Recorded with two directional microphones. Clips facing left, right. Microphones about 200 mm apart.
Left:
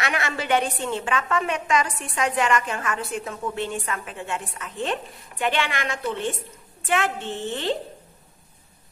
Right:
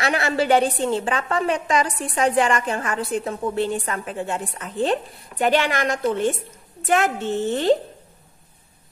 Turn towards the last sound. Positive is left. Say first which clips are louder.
# right 8 dB
turn(degrees=-40)  # may be behind; listen again after turning